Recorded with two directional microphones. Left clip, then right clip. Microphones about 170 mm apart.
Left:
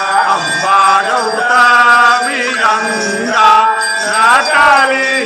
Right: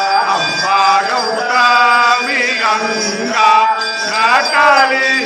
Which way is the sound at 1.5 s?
20° left (ahead or behind).